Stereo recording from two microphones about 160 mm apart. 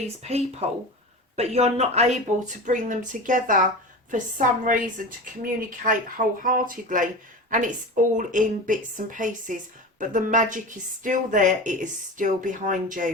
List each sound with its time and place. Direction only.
0.2 s speech: 40° right (ahead or behind)
2.6 s a woman's voice: 55° right (ahead or behind)